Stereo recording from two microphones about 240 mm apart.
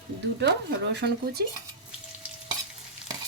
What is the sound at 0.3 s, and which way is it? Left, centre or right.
Speech, right.